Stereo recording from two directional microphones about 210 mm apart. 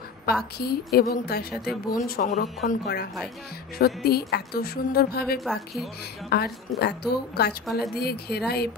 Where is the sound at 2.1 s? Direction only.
35° left (ahead or behind).